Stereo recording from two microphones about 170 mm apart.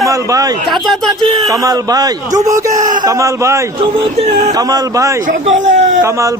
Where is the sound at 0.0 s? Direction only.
20° right (ahead or behind).